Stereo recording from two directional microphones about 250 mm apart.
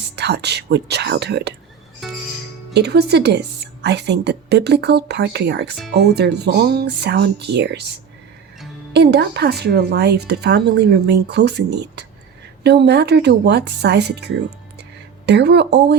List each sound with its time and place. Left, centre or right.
0.2 s speech: right
2.0 s music: centre
2.7 s a woman's voice: right
8.9 s a woman's voice: right